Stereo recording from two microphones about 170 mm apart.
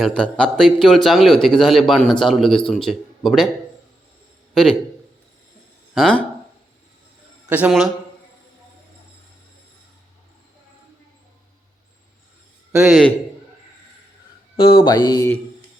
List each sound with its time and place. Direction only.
0.0 s a man's voice: 5° left (ahead or behind)
4.5 s a man's voice: centre (ahead or behind)
5.9 s speech: 5° left (ahead or behind)
7.5 s a man's voice: 5° right (ahead or behind)
12.7 s a man's voice: 5° right (ahead or behind)
14.8 s music: 25° left (ahead or behind)